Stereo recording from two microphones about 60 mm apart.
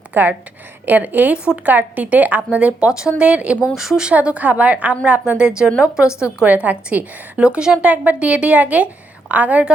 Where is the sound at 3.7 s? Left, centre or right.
Centre.